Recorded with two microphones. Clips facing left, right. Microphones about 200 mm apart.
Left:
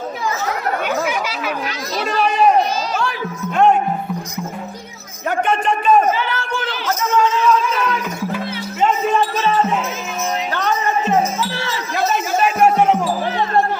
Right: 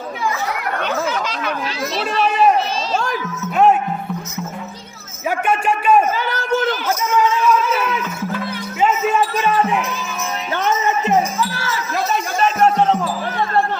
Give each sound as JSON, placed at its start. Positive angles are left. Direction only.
{"t": 0.8, "sound": "chatter", "side_deg": 10}
{"t": 2.0, "sound": "run", "side_deg": 0}
{"t": 5.5, "sound": "a sound", "side_deg": -10}
{"t": 6.1, "sound": "a sound", "side_deg": -40}
{"t": 7.7, "sound": "music", "side_deg": -5}
{"t": 10.5, "sound": "music", "side_deg": -20}
{"t": 11.9, "sound": "music", "side_deg": 0}